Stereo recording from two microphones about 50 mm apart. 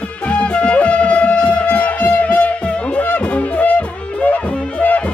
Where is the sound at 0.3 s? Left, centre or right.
Left.